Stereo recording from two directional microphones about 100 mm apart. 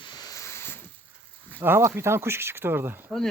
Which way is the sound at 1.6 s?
25° right (ahead or behind).